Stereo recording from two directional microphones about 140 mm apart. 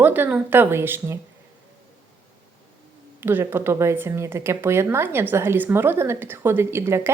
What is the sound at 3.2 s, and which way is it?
Speech, 15° right (ahead or behind).